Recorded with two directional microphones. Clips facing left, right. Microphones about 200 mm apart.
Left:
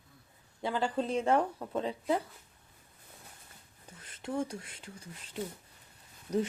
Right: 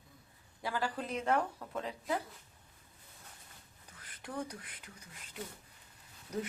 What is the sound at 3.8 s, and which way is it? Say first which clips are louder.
Speech: left 8 dB; 25° left (ahead or behind).